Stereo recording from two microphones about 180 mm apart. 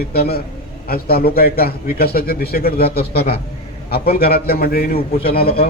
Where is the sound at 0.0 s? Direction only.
60° left (ahead or behind).